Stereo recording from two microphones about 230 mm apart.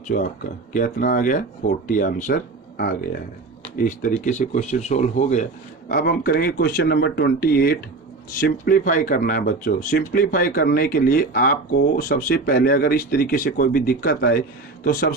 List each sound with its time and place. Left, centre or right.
0.1 s speech: left